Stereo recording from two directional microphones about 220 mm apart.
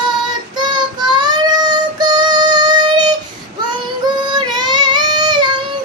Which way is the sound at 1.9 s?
20° right (ahead or behind).